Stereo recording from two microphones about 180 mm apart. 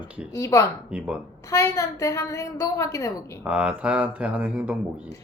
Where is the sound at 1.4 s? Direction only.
20° left (ahead or behind).